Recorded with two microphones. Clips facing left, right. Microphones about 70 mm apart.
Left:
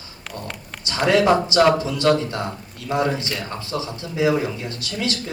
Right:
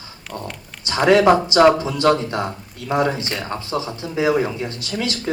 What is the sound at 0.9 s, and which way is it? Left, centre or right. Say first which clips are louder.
Speech: right 3 dB; right.